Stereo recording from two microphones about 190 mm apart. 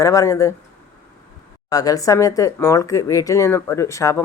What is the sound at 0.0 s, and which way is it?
Speech, 15° left (ahead or behind).